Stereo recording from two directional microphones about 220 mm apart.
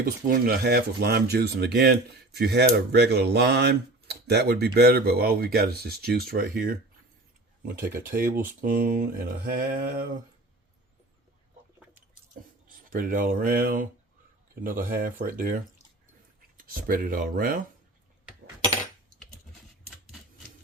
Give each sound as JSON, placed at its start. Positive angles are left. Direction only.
{"t": 0.0, "sound": "speech", "side_deg": -45}
{"t": 12.6, "sound": "speech", "side_deg": -40}
{"t": 16.6, "sound": "speech", "side_deg": -40}